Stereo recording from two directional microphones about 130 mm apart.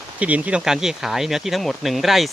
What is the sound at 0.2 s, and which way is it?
Speech, 10° right (ahead or behind).